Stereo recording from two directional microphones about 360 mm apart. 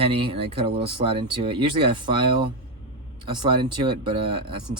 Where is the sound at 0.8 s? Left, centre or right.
Centre.